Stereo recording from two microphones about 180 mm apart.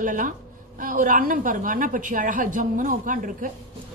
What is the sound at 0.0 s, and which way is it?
A woman's voice, 45° right (ahead or behind).